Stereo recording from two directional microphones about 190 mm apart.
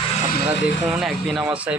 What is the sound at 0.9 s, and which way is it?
Speech, centre (ahead or behind).